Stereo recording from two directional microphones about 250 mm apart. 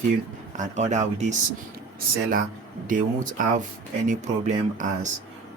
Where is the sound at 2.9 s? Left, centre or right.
Right.